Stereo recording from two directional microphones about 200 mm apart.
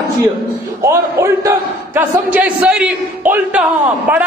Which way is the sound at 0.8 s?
15° right (ahead or behind).